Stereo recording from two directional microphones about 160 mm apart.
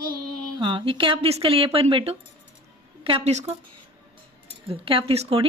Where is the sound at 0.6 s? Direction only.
30° right (ahead or behind).